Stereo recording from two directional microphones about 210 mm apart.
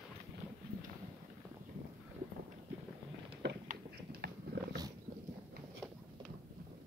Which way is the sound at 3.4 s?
55° right (ahead or behind).